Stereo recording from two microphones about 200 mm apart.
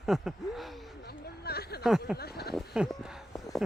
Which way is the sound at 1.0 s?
50° left (ahead or behind).